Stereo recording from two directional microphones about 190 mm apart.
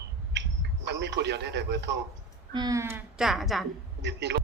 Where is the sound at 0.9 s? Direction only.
65° right (ahead or behind).